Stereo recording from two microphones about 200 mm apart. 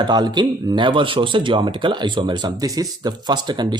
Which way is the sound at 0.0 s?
20° right (ahead or behind).